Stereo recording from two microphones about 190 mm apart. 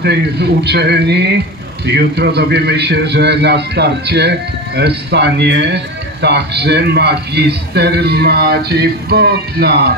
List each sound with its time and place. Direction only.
0.0 s a man's voice: 60° right (ahead or behind)